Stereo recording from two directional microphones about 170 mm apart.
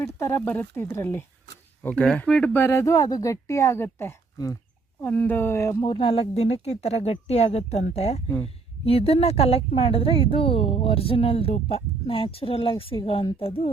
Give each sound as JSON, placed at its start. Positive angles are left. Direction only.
{"t": 0.0, "sound": "speech", "side_deg": 10}